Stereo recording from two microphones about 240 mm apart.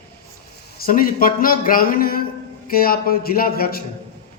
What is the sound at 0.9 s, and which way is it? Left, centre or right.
Speech, left.